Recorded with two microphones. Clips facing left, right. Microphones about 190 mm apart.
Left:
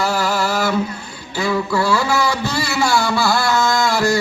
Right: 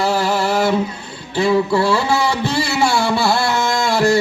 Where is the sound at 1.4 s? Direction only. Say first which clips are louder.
Right 4 dB; 30° right (ahead or behind).